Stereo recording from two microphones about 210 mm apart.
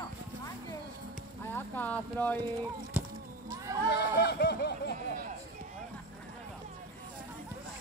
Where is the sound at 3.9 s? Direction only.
50° left (ahead or behind).